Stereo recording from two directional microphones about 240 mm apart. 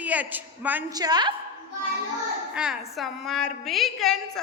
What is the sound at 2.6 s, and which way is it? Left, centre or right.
A woman's voice, centre.